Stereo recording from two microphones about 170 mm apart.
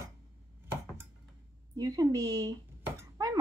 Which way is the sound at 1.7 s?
20° right (ahead or behind).